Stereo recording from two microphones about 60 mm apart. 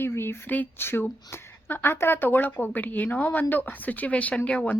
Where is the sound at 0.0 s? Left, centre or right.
Left.